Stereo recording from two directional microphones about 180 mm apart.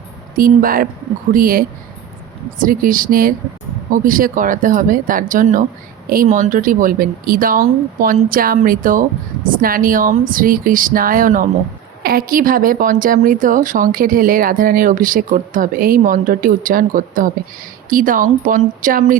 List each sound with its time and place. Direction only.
0.3 s speech: 50° right (ahead or behind)